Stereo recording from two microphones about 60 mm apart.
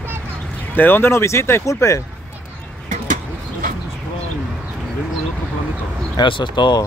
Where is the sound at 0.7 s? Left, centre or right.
Left.